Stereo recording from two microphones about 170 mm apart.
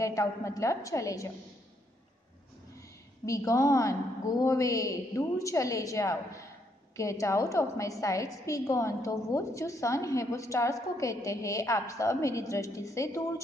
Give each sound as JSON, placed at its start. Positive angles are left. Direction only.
{"t": 0.0, "sound": "a woman's voice", "side_deg": 20}
{"t": 3.3, "sound": "a woman's voice", "side_deg": 20}